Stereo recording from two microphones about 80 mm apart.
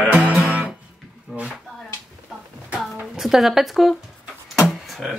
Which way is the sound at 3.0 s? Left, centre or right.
Centre.